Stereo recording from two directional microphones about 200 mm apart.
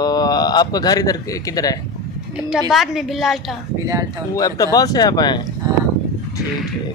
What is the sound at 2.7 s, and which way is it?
Speech, centre (ahead or behind).